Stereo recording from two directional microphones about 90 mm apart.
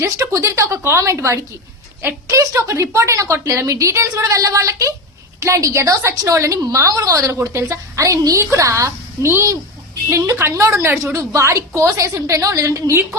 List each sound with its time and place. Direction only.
0.0 s a woman's voice: 35° right (ahead or behind)